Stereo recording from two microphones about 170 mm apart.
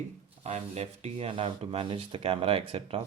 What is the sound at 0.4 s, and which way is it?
Speech, 40° right (ahead or behind).